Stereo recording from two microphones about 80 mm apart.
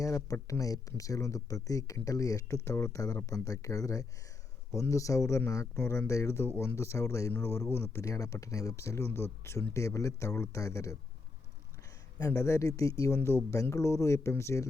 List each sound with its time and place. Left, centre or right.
0.0 s speech: left
12.2 s speech: left